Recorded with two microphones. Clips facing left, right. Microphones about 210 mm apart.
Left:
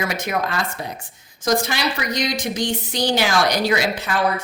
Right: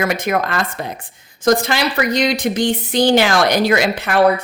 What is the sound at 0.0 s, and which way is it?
A woman's voice, 55° right (ahead or behind).